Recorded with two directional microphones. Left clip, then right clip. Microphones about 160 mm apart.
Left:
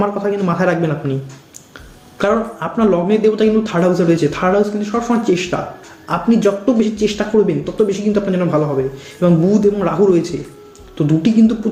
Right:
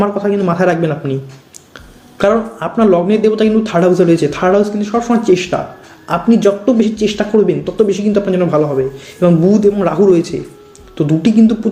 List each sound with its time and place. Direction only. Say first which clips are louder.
0.0 s speech: right 3 dB; 40° right (ahead or behind)
2.1 s speech: right 3 dB; 40° right (ahead or behind)